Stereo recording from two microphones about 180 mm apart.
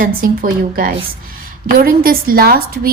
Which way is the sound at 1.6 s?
55° right (ahead or behind).